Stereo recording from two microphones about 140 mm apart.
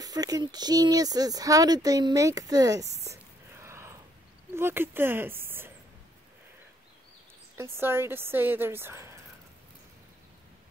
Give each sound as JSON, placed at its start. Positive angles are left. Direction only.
{"t": 0.0, "sound": "speech", "side_deg": -25}
{"t": 7.5, "sound": "speech", "side_deg": -20}